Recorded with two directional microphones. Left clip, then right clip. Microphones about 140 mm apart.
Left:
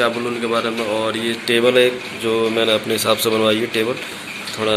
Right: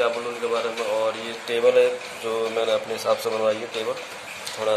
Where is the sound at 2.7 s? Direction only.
25° left (ahead or behind).